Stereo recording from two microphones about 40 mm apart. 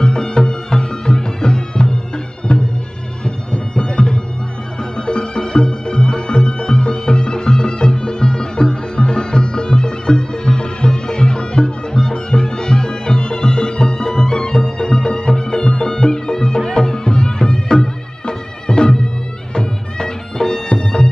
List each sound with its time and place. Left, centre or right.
0.0 s music: centre